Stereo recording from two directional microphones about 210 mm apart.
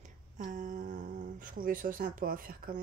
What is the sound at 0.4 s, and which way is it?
Speech, 35° right (ahead or behind).